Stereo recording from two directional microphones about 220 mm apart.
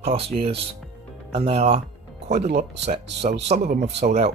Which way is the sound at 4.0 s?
30° right (ahead or behind).